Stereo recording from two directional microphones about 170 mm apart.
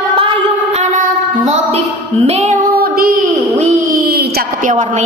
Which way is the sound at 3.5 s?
50° right (ahead or behind).